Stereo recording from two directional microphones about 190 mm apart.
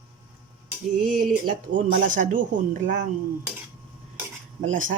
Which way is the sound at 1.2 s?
45° right (ahead or behind).